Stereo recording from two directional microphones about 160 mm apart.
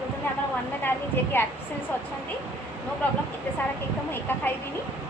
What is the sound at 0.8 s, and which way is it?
Speech, 15° left (ahead or behind).